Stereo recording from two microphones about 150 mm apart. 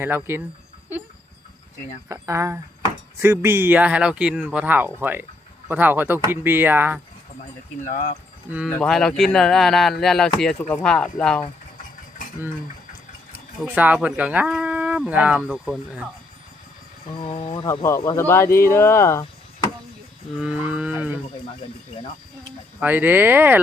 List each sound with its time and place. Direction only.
0.0 s speech: 15° right (ahead or behind)
2.0 s speech: 20° right (ahead or behind)
7.9 s speech: 55° left (ahead or behind)
8.4 s speech: 10° right (ahead or behind)
8.8 s speech: 5° left (ahead or behind)
13.7 s speech: 10° right (ahead or behind)
17.2 s speech: 35° left (ahead or behind)
17.7 s speech: 20° left (ahead or behind)
20.4 s speech: 10° right (ahead or behind)
22.8 s speech: 10° right (ahead or behind)